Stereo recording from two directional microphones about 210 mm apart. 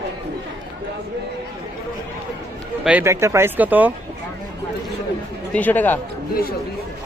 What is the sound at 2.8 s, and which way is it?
Speech, 10° right (ahead or behind).